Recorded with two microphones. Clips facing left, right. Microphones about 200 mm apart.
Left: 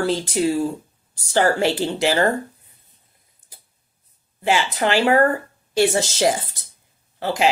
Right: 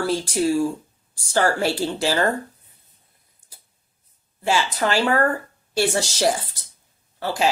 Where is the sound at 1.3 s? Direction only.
20° left (ahead or behind).